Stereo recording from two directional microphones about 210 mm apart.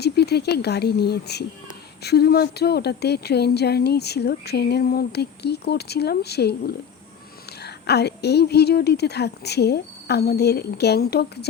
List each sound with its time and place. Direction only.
0.0 s speech: 50° left (ahead or behind)